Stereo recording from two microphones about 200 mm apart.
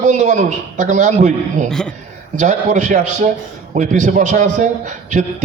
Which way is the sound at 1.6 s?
5° left (ahead or behind).